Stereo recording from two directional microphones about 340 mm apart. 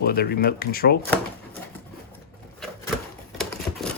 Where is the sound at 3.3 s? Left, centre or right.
Centre.